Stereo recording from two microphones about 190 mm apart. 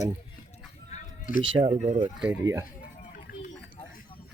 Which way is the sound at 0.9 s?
45° left (ahead or behind).